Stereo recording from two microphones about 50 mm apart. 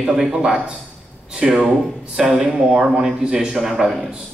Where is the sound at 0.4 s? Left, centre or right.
Centre.